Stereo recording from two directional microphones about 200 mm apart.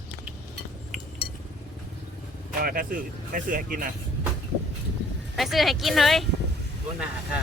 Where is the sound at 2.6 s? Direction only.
45° right (ahead or behind).